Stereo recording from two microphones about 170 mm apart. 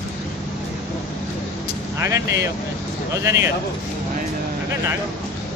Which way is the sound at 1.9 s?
15° right (ahead or behind).